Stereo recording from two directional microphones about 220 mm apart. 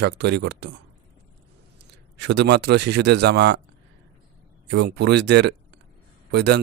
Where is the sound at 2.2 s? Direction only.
50° right (ahead or behind).